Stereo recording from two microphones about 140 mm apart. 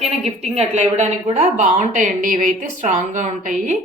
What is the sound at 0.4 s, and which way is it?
A woman's voice, 50° right (ahead or behind).